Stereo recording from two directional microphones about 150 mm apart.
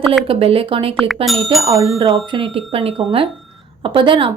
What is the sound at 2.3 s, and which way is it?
A woman's voice, 35° right (ahead or behind).